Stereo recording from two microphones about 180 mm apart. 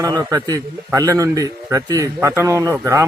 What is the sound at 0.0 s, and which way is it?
A man's voice, 20° right (ahead or behind).